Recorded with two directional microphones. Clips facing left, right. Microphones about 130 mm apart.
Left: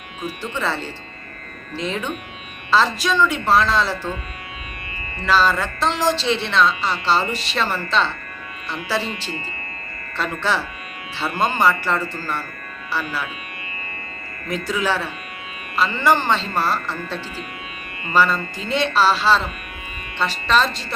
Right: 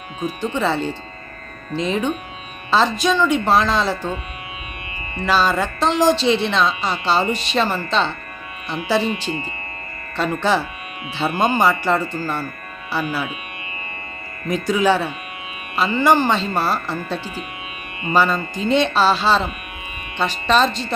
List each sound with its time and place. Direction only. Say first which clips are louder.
0.5 s speech: right 4 dB; 15° right (ahead or behind)
14.4 s speech: right 5 dB; 20° right (ahead or behind)